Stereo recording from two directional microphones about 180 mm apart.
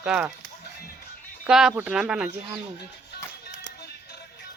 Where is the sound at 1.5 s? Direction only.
5° right (ahead or behind).